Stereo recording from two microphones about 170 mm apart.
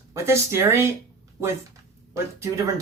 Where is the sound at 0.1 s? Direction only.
15° right (ahead or behind).